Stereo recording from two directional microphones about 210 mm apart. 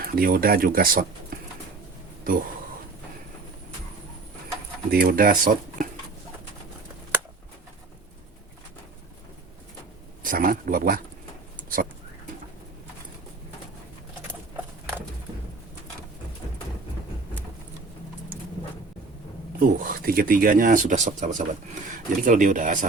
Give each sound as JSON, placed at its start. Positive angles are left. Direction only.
{"t": 0.0, "sound": "speech", "side_deg": -45}
{"t": 1.3, "sound": "a sound", "side_deg": -45}
{"t": 2.2, "sound": "speech", "side_deg": -40}
{"t": 4.9, "sound": "speech", "side_deg": -45}
{"t": 10.2, "sound": "speech", "side_deg": -40}
{"t": 19.5, "sound": "speech", "side_deg": -45}